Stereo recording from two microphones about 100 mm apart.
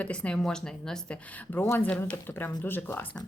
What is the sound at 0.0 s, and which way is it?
Speech, 10° left (ahead or behind).